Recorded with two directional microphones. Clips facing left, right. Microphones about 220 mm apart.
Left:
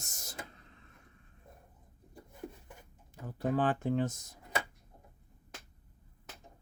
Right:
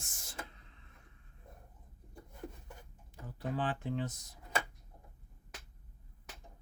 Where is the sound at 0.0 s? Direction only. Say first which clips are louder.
Left 1 dB; 40° left (ahead or behind).